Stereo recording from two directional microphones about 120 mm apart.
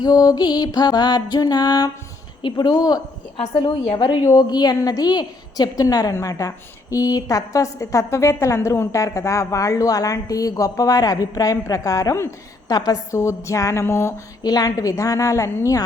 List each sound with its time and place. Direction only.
0.0 s a woman's voice: 35° left (ahead or behind)
3.3 s a woman's voice: 55° left (ahead or behind)
4.2 s a woman's voice: 30° left (ahead or behind)
14.4 s a woman's voice: 35° left (ahead or behind)